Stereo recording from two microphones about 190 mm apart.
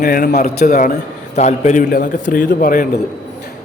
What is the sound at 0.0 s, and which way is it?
A man's voice, 50° left (ahead or behind).